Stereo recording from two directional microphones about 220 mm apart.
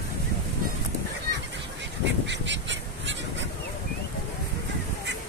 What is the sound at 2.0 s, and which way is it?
Goose, 55° right (ahead or behind).